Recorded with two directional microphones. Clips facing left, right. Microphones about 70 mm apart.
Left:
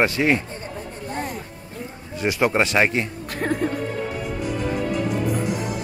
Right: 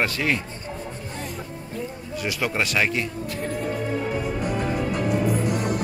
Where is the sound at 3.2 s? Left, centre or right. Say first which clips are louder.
Left 4 dB; left.